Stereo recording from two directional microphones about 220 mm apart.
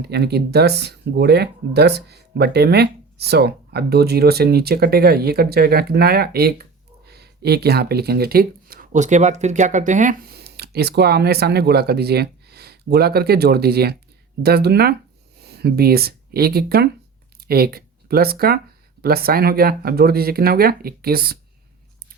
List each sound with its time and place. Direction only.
0.0 s speech: 50° right (ahead or behind)